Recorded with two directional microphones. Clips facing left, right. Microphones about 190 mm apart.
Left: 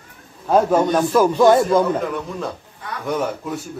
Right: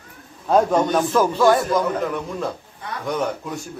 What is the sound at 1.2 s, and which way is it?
Speech, 15° left (ahead or behind).